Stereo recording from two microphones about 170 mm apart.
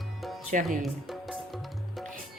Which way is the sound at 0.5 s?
50° right (ahead or behind).